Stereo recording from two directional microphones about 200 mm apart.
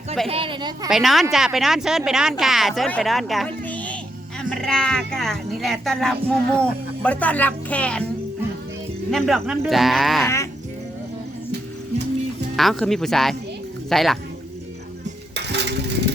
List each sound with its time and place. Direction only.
0.3 s a woman's voice: 25° right (ahead or behind)
0.9 s a woman's voice: centre (ahead or behind)
9.0 s speech: centre (ahead or behind)
10.2 s sheep: 15° left (ahead or behind)
12.5 s speech: centre (ahead or behind)
15.4 s a sound: 60° right (ahead or behind)